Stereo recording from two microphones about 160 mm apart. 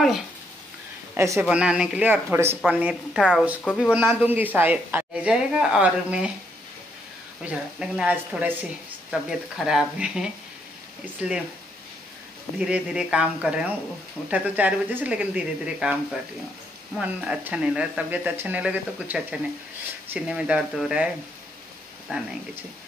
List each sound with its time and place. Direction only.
1.1 s speech: 20° right (ahead or behind)
1.4 s speech: 5° right (ahead or behind)
3.9 s speech: 10° right (ahead or behind)
7.4 s speech: 5° right (ahead or behind)
12.5 s speech: 5° right (ahead or behind)
22.1 s speech: 5° right (ahead or behind)